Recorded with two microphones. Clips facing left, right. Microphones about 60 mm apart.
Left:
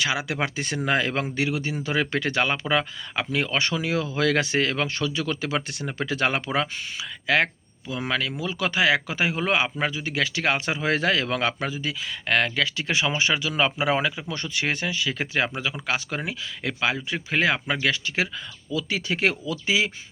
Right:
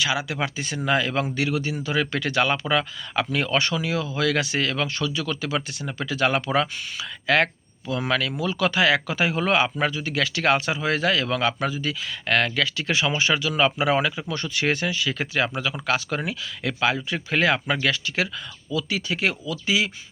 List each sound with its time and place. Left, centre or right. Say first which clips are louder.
0.0 s speech: right 1 dB; left
0.9 s speech: right 2 dB; left; by 9.6 s centre
9.6 s a man's voice: right 2 dB; centre
9.9 s speech: right 1 dB; left